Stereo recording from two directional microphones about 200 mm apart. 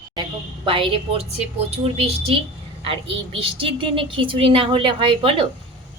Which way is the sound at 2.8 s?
30° right (ahead or behind).